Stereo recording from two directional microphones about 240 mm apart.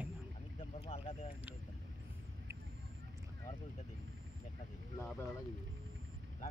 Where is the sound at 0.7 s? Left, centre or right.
Left.